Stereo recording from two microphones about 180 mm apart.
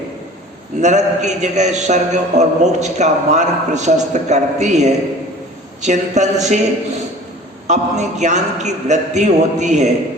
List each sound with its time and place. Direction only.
0.8 s a man's voice: 40° right (ahead or behind)
7.7 s a man's voice: 40° right (ahead or behind)